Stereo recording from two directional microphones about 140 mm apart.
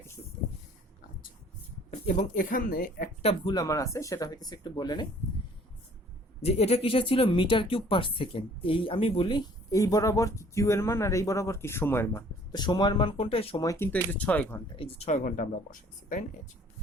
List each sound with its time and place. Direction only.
0.2 s a sound: 20° left (ahead or behind)
1.9 s speech: 55° left (ahead or behind); by 3.1 s 90° left
3.2 s speech: 45° left (ahead or behind)
3.5 s speech: 25° left (ahead or behind)
6.4 s speech: 45° left (ahead or behind)
9.7 s speech: 25° left (ahead or behind)
12.5 s speech: 30° left (ahead or behind)
13.6 s speech: 20° left (ahead or behind)
14.8 s speech: 45° left (ahead or behind)
15.2 s speech: 75° left (ahead or behind)